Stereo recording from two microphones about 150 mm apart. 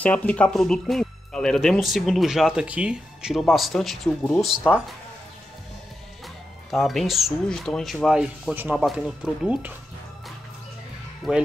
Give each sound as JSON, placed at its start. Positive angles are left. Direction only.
{"t": 0.0, "sound": "speech", "side_deg": 10}
{"t": 6.2, "sound": "speech", "side_deg": 0}
{"t": 11.2, "sound": "speech", "side_deg": 0}